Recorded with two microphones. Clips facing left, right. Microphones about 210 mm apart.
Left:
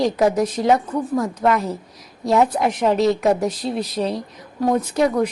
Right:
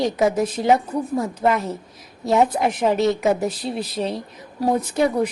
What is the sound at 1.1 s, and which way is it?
Speech, 25° right (ahead or behind).